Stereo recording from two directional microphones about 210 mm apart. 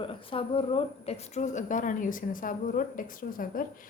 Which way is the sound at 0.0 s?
25° left (ahead or behind).